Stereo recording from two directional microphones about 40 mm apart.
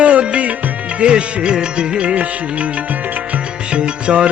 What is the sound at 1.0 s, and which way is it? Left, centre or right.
Music, right.